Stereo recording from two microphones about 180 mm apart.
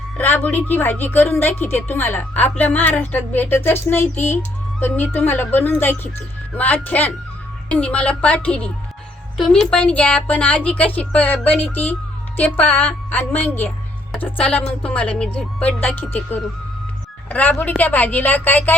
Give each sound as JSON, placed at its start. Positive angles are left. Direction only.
{"t": 0.2, "sound": "a woman's voice", "side_deg": 10}
{"t": 14.4, "sound": "a woman's voice", "side_deg": 5}